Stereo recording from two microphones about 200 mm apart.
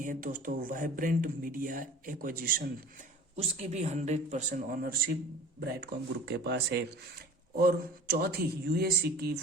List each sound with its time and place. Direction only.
0.0 s speech: 40° right (ahead or behind)
3.3 s a man's voice: 35° right (ahead or behind)
6.2 s speech: 55° right (ahead or behind)